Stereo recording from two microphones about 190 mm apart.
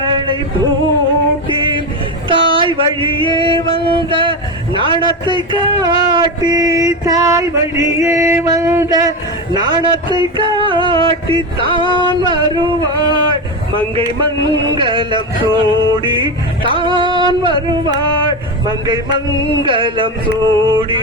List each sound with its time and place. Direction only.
0.0 s male singing: 25° right (ahead or behind)
1.5 s music: 25° right (ahead or behind)
2.3 s a man's voice: 25° right (ahead or behind)
16.7 s a sound: 25° right (ahead or behind)
19.6 s a man's voice: 25° right (ahead or behind)